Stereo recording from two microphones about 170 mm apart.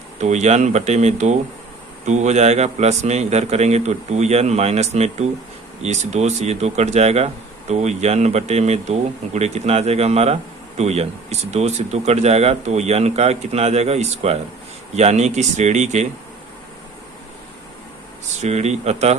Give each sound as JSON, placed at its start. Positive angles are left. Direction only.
{"t": 0.2, "sound": "speech", "side_deg": -45}
{"t": 18.4, "sound": "speech", "side_deg": -40}